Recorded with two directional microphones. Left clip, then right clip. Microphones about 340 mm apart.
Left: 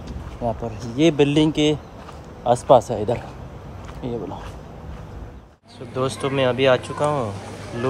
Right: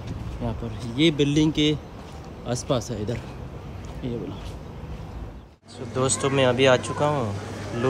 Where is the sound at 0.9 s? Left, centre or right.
Centre.